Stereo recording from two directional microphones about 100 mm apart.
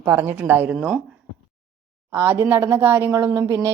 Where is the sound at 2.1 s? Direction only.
25° right (ahead or behind).